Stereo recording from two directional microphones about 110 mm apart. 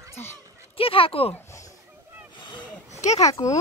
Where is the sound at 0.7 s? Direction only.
55° left (ahead or behind).